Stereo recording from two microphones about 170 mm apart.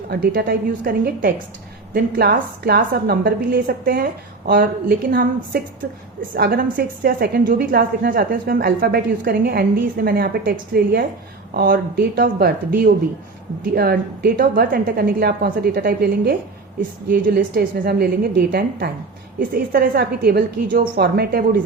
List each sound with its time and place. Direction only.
0.1 s a woman's voice: 60° right (ahead or behind)